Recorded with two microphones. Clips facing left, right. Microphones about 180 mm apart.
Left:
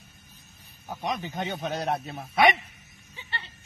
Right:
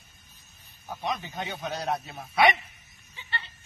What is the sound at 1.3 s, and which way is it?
Speech, 50° left (ahead or behind).